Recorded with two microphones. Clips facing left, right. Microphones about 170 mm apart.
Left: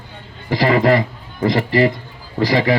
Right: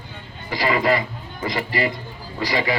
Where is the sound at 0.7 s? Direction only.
55° left (ahead or behind).